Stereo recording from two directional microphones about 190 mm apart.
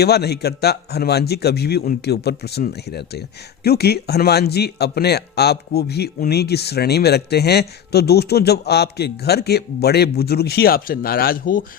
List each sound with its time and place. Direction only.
0.0 s speech: 60° left (ahead or behind)